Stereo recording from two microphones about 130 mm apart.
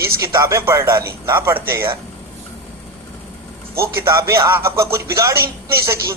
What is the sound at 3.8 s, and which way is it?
A man's voice, 20° right (ahead or behind).